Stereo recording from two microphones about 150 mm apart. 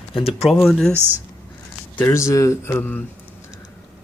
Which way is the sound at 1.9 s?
20° left (ahead or behind).